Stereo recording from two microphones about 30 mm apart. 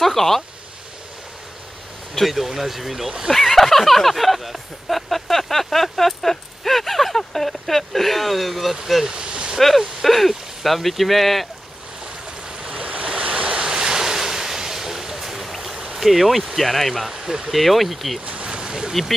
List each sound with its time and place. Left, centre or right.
0.0 s speech: centre
2.2 s speech: centre
3.3 s speech: centre
9.1 s a sound: right
10.0 s speech: centre
12.4 s waves: centre
13.2 s waves: right; by 15.7 s centre
15.7 s stream: centre
16.0 s speech: centre
17.1 s speech: centre
17.5 s speech: centre
18.2 s a sound: right
18.5 s a sound: right